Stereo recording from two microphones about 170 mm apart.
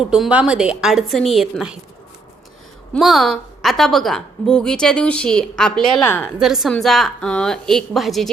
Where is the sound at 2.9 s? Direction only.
Centre (ahead or behind).